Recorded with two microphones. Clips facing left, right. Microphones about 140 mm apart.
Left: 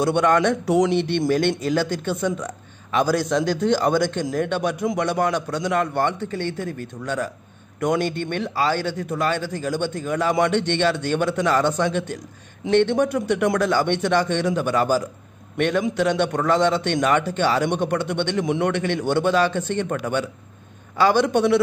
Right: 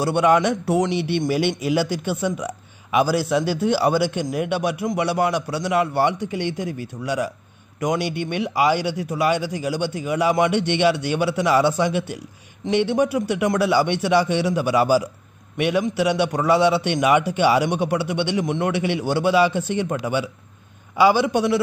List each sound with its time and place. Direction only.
0.0 s a man's voice: 10° right (ahead or behind)
21.0 s a man's voice: 10° right (ahead or behind)